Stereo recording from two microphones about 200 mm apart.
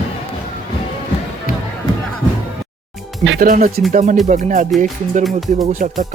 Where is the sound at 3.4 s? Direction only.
45° right (ahead or behind).